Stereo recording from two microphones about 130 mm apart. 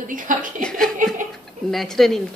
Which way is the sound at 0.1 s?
90° right.